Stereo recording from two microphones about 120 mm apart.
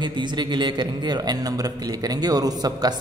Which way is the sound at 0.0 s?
40° right (ahead or behind).